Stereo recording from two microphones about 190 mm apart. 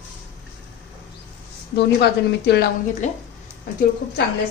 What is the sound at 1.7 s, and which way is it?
Speech, 60° left (ahead or behind).